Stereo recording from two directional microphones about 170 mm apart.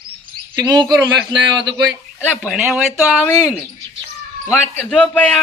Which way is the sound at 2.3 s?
Centre (ahead or behind).